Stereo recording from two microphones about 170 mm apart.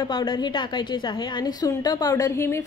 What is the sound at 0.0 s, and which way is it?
Speech, 25° left (ahead or behind).